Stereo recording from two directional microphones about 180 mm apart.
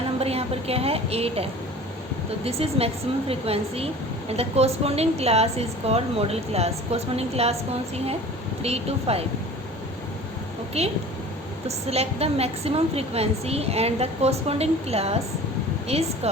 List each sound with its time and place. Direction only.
0.2 s a woman's voice: 35° right (ahead or behind)
8.6 s a woman's voice: 35° right (ahead or behind)
10.8 s a woman's voice: 35° right (ahead or behind)